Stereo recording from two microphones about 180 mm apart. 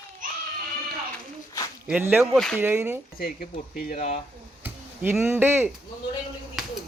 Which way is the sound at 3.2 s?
55° left (ahead or behind).